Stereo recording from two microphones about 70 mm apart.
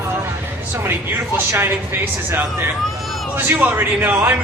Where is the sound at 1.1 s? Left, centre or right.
Right.